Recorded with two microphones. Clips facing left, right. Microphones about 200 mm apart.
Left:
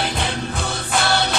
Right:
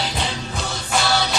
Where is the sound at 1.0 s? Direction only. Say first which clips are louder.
Left 1 dB; 55° left (ahead or behind).